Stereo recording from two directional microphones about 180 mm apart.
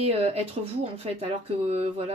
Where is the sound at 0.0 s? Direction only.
35° right (ahead or behind).